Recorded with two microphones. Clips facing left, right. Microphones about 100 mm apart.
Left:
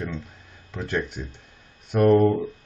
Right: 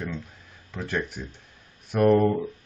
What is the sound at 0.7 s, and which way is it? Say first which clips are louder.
Speech: left 2 dB; centre (ahead or behind).